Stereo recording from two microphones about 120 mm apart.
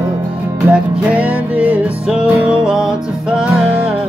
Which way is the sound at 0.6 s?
10° right (ahead or behind).